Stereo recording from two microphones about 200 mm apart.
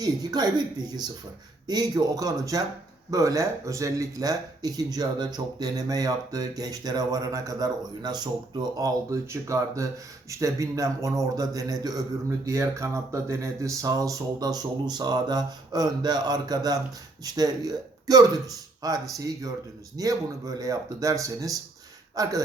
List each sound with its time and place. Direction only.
0.0 s speech: 20° right (ahead or behind)